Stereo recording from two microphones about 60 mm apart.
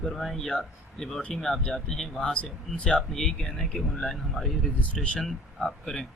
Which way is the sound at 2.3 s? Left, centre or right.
Centre.